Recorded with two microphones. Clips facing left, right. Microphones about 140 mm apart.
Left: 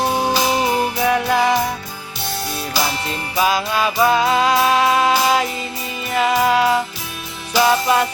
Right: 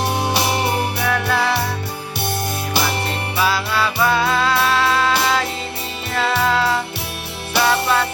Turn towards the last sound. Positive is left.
turn(degrees=15)  # may be behind; listen again after turning